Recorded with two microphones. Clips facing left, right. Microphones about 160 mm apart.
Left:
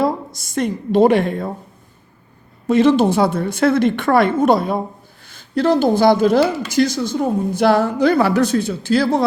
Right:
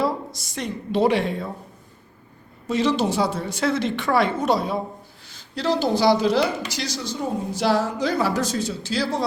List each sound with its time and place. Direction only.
0.0 s speech: 50° left (ahead or behind)
2.6 s a woman's voice: 55° left (ahead or behind)